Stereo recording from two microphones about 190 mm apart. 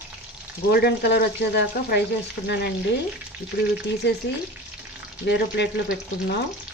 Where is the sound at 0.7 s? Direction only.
55° left (ahead or behind).